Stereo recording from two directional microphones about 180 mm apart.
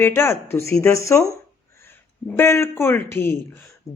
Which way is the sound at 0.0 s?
15° left (ahead or behind).